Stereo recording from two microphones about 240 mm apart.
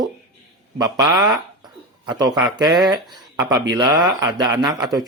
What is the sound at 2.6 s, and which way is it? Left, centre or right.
Speech, centre.